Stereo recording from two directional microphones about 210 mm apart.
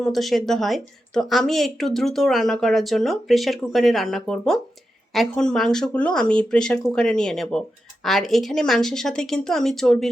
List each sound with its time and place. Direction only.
0.0 s a woman's voice: centre (ahead or behind)